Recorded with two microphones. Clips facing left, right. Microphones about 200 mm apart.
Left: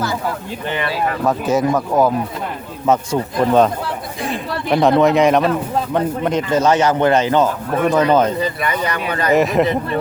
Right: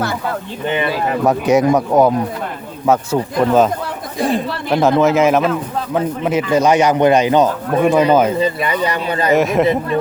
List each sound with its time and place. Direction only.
1.3 s speech: 15° right (ahead or behind)
4.7 s speech: centre (ahead or behind)
8.4 s speech: 25° right (ahead or behind)
9.3 s speech: centre (ahead or behind)